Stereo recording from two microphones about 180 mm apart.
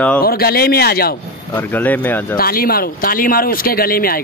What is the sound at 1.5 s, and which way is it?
Speech, 10° left (ahead or behind).